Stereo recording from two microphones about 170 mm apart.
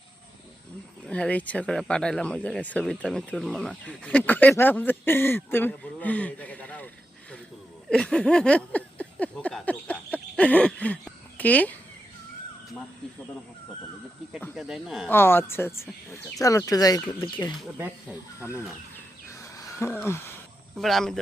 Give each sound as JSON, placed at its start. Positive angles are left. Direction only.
{"t": 1.0, "sound": "speech", "side_deg": 5}
{"t": 7.9, "sound": "a sound", "side_deg": 5}
{"t": 14.5, "sound": "speech", "side_deg": 0}
{"t": 15.1, "sound": "speech", "side_deg": 15}
{"t": 17.7, "sound": "speech", "side_deg": -10}
{"t": 18.3, "sound": "speech", "side_deg": 15}
{"t": 19.3, "sound": "a sound", "side_deg": 15}
{"t": 20.7, "sound": "speech", "side_deg": 0}